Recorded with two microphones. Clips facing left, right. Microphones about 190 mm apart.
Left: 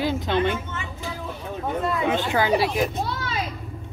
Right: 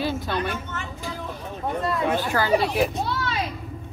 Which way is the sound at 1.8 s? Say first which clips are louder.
Even; 5° left (ahead or behind).